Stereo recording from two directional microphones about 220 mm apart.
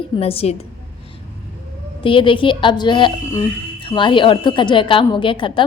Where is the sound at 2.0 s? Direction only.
25° left (ahead or behind).